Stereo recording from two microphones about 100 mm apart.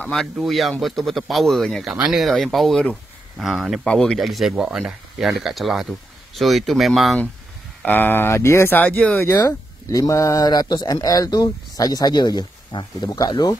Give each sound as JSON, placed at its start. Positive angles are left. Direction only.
{"t": 0.1, "sound": "speech", "side_deg": 0}
{"t": 3.8, "sound": "speech", "side_deg": 10}
{"t": 7.8, "sound": "speech", "side_deg": 20}
{"t": 9.8, "sound": "speech", "side_deg": 35}